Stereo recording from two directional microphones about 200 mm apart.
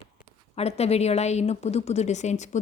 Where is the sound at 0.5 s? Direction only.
30° left (ahead or behind).